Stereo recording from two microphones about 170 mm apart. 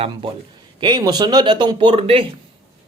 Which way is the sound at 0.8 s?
25° right (ahead or behind).